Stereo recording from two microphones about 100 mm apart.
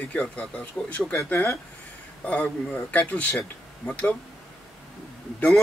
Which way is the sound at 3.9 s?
15° left (ahead or behind).